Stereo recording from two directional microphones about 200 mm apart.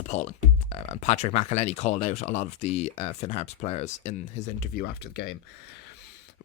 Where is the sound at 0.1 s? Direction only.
35° left (ahead or behind).